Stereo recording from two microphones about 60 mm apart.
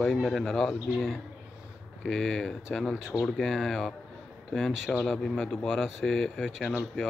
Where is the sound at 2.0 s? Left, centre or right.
Centre.